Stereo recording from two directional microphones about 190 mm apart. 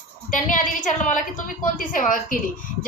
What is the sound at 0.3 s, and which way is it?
A woman's voice, 45° left (ahead or behind).